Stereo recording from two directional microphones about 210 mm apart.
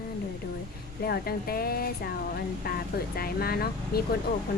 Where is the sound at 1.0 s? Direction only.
45° left (ahead or behind).